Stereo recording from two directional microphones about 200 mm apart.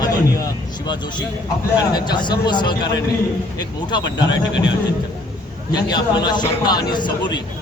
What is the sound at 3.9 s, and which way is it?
Speech, 20° left (ahead or behind).